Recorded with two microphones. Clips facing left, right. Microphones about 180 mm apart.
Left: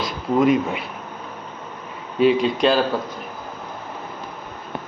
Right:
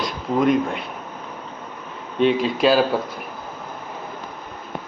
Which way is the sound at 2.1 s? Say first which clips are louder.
Left 2 dB; centre (ahead or behind).